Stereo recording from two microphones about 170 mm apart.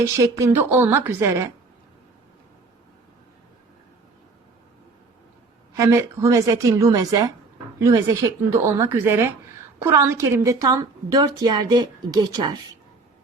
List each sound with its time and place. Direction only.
0.0 s speech: 20° right (ahead or behind)
5.7 s a woman's voice: 15° right (ahead or behind)